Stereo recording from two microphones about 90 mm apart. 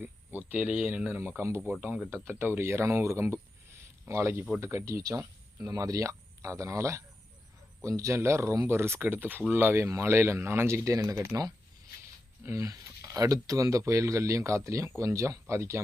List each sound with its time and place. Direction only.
0.0 s speech: 20° right (ahead or behind)
1.4 s speech: 30° right (ahead or behind)
3.7 s a sound: 30° right (ahead or behind)
4.6 s speech: 35° right (ahead or behind)
12.5 s speech: 40° right (ahead or behind)